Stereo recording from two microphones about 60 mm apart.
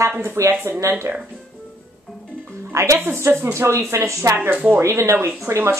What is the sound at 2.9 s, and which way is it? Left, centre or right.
Speech, right.